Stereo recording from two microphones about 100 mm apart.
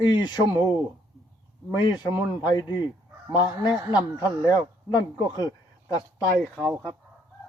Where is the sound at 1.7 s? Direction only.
45° left (ahead or behind).